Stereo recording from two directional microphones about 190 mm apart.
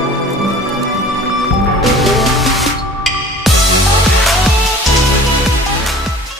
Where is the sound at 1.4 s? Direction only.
Centre (ahead or behind).